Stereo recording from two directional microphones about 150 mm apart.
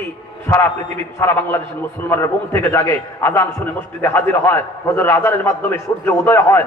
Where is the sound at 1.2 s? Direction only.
15° left (ahead or behind).